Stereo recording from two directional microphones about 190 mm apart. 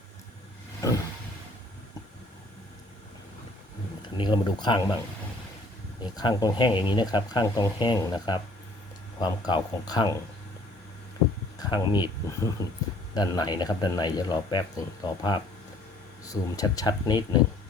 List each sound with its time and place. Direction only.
0.8 s vehicle: 15° left (ahead or behind)
4.2 s speech: 25° left (ahead or behind)
6.0 s speech: 20° left (ahead or behind)
11.6 s speech: 25° left (ahead or behind)